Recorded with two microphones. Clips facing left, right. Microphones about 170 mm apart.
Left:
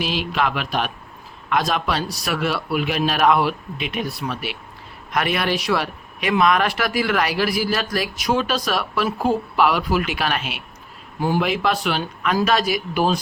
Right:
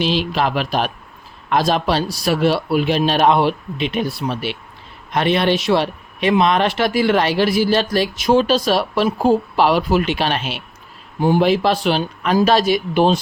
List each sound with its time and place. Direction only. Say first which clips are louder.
0.0 s speech: right 4 dB; 30° right (ahead or behind)